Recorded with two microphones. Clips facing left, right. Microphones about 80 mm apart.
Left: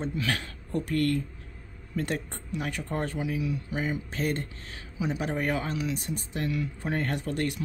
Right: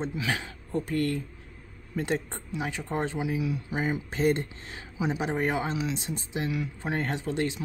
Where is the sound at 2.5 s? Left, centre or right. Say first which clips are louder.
Right 1 dB; centre.